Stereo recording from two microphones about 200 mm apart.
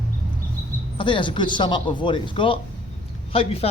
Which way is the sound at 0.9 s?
25° left (ahead or behind).